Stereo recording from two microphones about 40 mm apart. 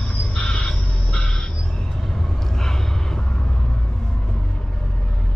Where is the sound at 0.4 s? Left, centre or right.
Left.